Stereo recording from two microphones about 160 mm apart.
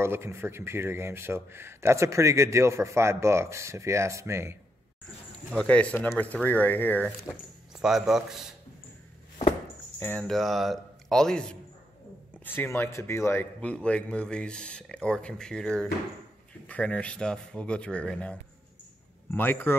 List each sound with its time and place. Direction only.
0.0 s speech: 15° right (ahead or behind)
5.5 s speech: 5° left (ahead or behind)
7.7 s speech: 5° right (ahead or behind)
9.9 s speech: 15° left (ahead or behind)
10.2 s speech: centre (ahead or behind)